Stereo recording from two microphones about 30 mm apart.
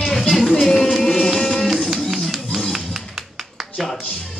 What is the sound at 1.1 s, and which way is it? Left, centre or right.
Music, centre.